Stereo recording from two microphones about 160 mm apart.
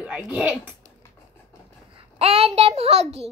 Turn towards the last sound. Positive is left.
turn(degrees=-40)  # may be behind; listen again after turning